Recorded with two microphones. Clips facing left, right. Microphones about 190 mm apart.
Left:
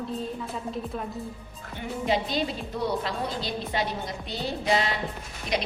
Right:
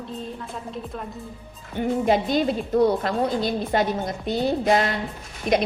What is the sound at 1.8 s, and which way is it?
A woman's voice, 50° right (ahead or behind).